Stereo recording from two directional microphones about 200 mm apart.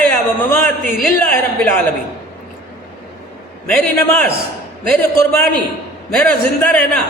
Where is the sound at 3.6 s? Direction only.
5° left (ahead or behind).